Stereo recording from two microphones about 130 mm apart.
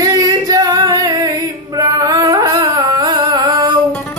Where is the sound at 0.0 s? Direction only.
30° right (ahead or behind).